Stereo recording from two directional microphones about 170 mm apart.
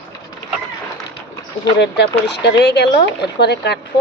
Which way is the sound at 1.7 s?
85° left.